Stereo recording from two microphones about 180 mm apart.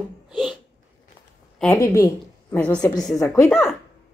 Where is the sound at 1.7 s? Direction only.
15° left (ahead or behind).